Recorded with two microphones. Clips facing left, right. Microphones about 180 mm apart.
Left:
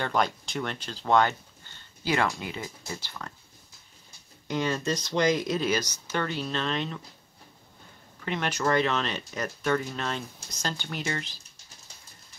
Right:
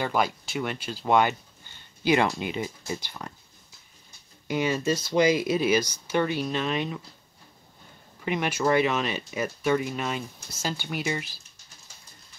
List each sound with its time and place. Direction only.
0.0 s speech: 5° right (ahead or behind)
4.5 s speech: 10° right (ahead or behind)
8.3 s speech: 10° right (ahead or behind)